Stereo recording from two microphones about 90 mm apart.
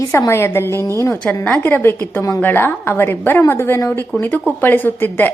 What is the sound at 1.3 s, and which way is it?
A woman's voice, 20° left (ahead or behind).